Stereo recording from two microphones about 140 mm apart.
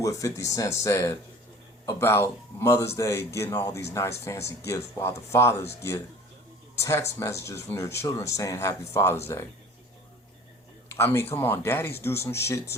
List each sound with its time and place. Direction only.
0.0 s speech: 20° left (ahead or behind)
10.8 s speech: 20° left (ahead or behind)